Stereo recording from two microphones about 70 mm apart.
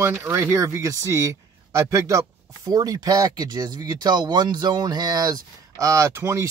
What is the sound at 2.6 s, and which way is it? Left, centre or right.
A man's voice, right.